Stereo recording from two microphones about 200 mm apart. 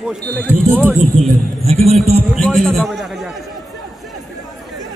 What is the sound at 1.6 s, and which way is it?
Speech, 30° right (ahead or behind).